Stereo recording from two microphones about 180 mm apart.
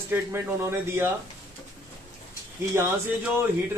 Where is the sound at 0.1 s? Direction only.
10° right (ahead or behind).